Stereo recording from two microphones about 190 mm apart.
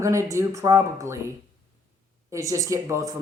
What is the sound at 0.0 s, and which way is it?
Speech, 15° right (ahead or behind).